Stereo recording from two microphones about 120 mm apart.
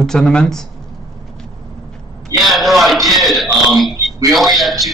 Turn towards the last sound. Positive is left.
turn(degrees=0)  # may be behind; listen again after turning